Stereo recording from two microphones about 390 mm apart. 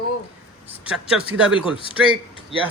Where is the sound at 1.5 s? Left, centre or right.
Centre.